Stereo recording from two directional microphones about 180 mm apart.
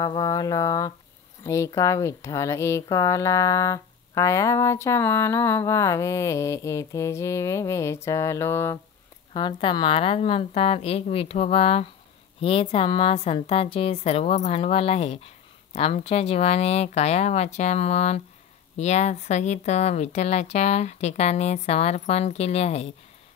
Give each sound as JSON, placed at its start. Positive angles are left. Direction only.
{"t": 0.0, "sound": "a sound", "side_deg": 20}
{"t": 1.4, "sound": "speech", "side_deg": 15}
{"t": 9.3, "sound": "a woman's voice", "side_deg": 25}